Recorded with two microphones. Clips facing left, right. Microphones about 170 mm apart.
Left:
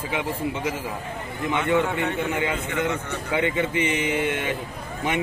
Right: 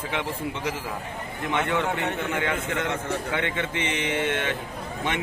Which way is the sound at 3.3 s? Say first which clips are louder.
Left 4 dB; 5° left (ahead or behind).